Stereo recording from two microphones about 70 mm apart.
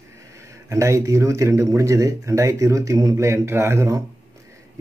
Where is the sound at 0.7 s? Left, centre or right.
Right.